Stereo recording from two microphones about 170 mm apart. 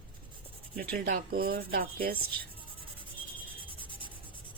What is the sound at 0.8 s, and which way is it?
Speech, 55° right (ahead or behind).